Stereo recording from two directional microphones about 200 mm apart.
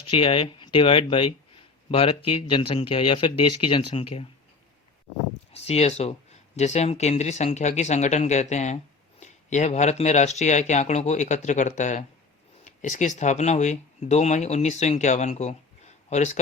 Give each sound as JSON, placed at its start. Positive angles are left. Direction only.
{"t": 0.0, "sound": "speech", "side_deg": 25}
{"t": 5.6, "sound": "speech", "side_deg": 30}